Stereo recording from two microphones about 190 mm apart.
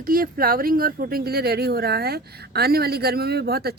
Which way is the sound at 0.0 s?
50° right (ahead or behind).